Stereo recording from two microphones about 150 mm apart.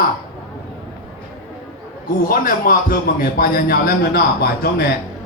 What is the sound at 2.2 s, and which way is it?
A man's voice, 70° left (ahead or behind).